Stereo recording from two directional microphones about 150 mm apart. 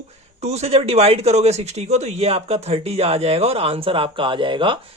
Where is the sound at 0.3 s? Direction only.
45° right (ahead or behind).